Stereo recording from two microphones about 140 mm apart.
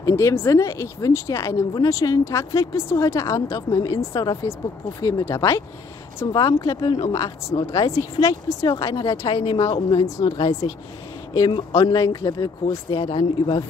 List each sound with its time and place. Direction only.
0.0 s speech: 20° left (ahead or behind)
9.3 s speech: 45° left (ahead or behind)
10.0 s speech: 25° left (ahead or behind)
11.9 s speech: 25° left (ahead or behind)